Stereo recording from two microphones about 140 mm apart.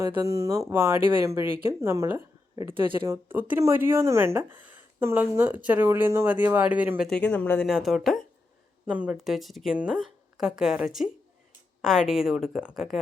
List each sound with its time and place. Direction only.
0.1 s speech: 25° right (ahead or behind)
2.7 s speech: 35° right (ahead or behind)
3.3 s speech: 15° right (ahead or behind)
7.1 s speech: 10° left (ahead or behind)
7.7 s a woman's voice: centre (ahead or behind)